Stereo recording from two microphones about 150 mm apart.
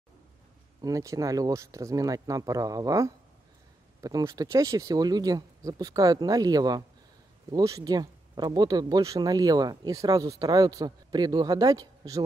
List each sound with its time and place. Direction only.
0.7 s speech: 25° right (ahead or behind)